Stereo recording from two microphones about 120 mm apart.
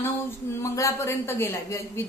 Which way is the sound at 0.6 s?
25° left (ahead or behind).